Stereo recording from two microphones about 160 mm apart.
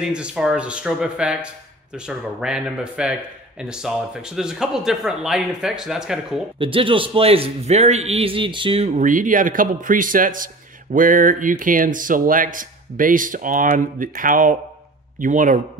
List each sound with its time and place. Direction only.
0.0 s speech: 5° right (ahead or behind)
6.6 s a man's voice: 35° right (ahead or behind); by 15.6 s 55° right (ahead or behind)